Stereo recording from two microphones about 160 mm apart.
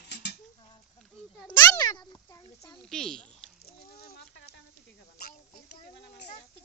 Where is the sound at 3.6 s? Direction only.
75° left (ahead or behind).